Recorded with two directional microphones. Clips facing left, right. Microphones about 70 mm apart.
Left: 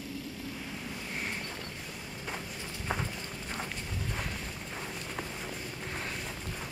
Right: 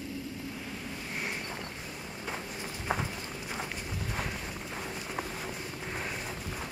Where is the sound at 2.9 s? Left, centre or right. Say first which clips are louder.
Right 2 dB; centre.